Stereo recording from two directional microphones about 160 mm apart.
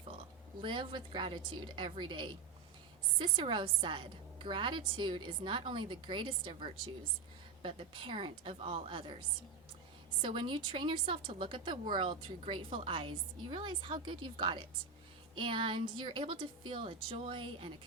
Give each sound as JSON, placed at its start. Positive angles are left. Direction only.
{"t": 0.6, "sound": "a woman's voice", "side_deg": -30}